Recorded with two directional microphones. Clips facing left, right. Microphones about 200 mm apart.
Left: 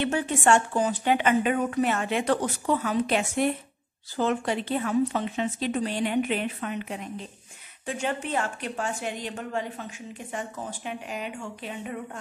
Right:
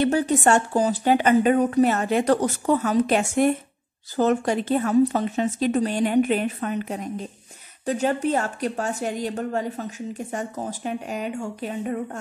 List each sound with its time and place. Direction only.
0.0 s a woman's voice: 40° right (ahead or behind)